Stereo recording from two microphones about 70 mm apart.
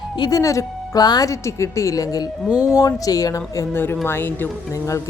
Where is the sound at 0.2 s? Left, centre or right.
Left.